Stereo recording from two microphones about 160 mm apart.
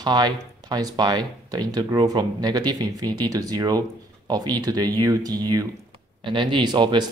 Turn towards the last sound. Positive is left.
turn(degrees=-30)  # may be behind; listen again after turning